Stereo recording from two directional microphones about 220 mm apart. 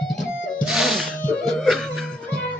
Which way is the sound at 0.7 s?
Centre (ahead or behind).